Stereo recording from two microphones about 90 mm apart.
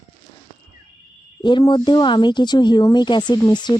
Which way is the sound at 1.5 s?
60° left (ahead or behind).